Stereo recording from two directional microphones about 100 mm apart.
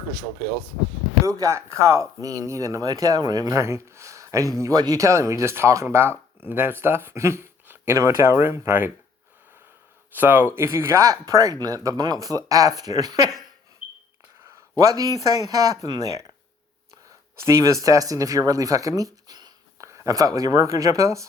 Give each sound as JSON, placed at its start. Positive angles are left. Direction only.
{"t": 1.2, "sound": "speech", "side_deg": -30}
{"t": 10.2, "sound": "speech", "side_deg": -20}
{"t": 14.8, "sound": "speech", "side_deg": -35}
{"t": 17.3, "sound": "speech", "side_deg": -30}